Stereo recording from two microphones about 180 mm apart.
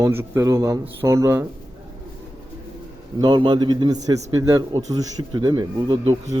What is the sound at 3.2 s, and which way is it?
A man's voice, 25° right (ahead or behind).